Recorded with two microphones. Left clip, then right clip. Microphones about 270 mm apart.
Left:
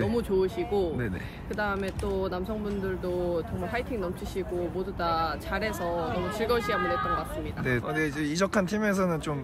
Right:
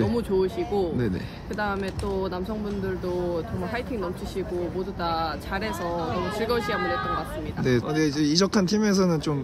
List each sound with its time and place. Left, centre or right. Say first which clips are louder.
0.0 s speech: right 2 dB; centre
3.3 s speech: right 1 dB; centre
6.0 s speech: right 3 dB; right
6.4 s speech: even; centre
6.8 s speech: right 1 dB; right
7.6 s speech: right 5 dB; centre